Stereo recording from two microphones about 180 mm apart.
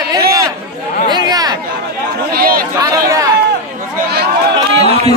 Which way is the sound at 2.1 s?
55° right (ahead or behind).